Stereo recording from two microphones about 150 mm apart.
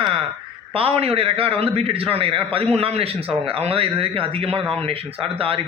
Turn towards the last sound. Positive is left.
turn(degrees=-40)  # may be behind; listen again after turning